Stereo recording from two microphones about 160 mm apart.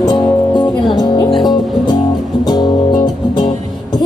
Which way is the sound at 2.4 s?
25° left (ahead or behind).